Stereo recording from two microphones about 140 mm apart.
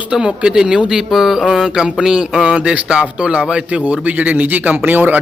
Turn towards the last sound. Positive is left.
turn(degrees=-15)  # may be behind; listen again after turning